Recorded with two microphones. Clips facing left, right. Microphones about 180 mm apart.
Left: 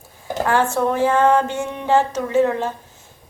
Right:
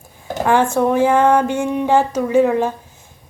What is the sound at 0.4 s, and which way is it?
Speech, 15° right (ahead or behind).